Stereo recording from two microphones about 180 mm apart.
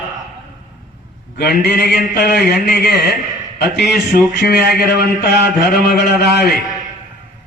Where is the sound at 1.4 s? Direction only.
60° left (ahead or behind).